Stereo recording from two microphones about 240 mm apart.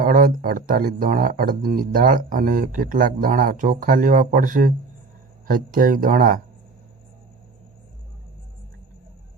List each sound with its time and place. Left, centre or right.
0.0 s speech: right